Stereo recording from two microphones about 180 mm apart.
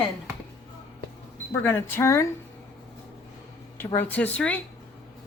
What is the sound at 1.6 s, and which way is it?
Speech, 15° left (ahead or behind).